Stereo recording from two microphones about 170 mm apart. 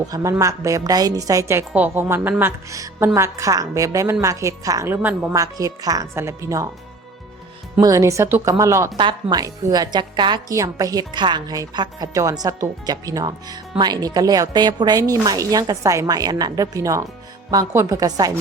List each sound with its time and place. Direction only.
0.0 s a woman's voice: 20° right (ahead or behind)
7.8 s a woman's voice: 20° right (ahead or behind)